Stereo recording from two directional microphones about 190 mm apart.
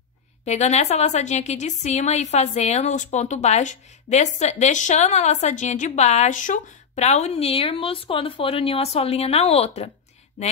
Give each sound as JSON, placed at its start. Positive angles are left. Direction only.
{"t": 0.5, "sound": "a woman's voice", "side_deg": 35}